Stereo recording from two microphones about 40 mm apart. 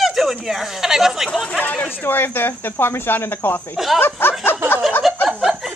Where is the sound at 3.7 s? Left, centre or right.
Centre.